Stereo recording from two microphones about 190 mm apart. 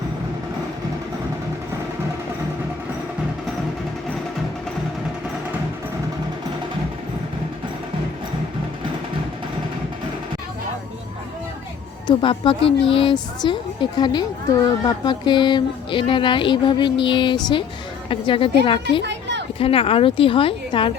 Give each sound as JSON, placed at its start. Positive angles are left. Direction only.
{"t": 12.0, "sound": "a woman's voice", "side_deg": 25}
{"t": 19.0, "sound": "a sound", "side_deg": -65}
{"t": 19.5, "sound": "a woman's voice", "side_deg": 30}